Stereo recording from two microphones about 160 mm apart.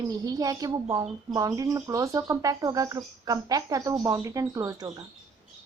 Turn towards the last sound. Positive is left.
turn(degrees=-20)  # may be behind; listen again after turning